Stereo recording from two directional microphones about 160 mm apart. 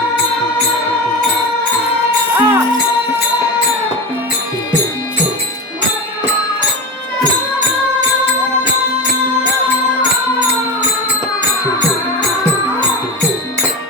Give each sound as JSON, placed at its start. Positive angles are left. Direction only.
{"t": 2.3, "sound": "music", "side_deg": -20}